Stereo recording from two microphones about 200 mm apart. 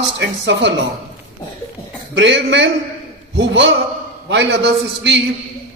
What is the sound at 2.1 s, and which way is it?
Speech, 65° right (ahead or behind).